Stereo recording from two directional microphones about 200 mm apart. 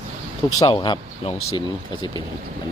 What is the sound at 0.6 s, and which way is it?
Speech, 25° left (ahead or behind).